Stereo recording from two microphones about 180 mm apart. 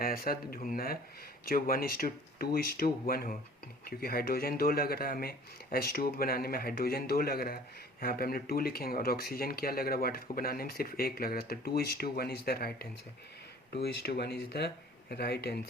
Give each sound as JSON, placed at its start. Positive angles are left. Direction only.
{"t": 0.0, "sound": "speech", "side_deg": 55}